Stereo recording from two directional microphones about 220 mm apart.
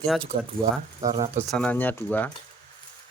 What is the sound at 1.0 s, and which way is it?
Speech, 15° right (ahead or behind).